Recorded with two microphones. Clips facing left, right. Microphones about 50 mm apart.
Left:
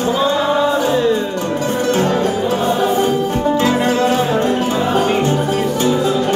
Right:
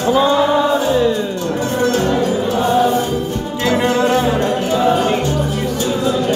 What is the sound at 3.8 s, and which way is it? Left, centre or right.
Music, centre.